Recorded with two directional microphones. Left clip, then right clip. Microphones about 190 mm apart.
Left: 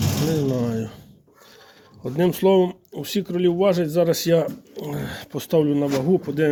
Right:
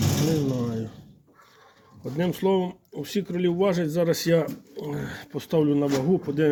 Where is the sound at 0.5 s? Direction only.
30° left (ahead or behind).